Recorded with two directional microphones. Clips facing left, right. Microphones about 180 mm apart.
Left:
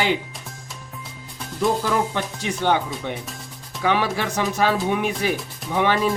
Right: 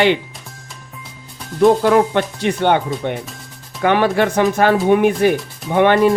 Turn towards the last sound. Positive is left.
turn(degrees=-60)  # may be behind; listen again after turning